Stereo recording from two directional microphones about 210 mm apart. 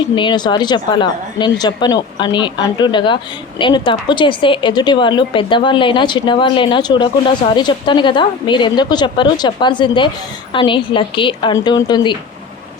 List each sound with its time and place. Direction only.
0.2 s a woman's voice: 20° left (ahead or behind)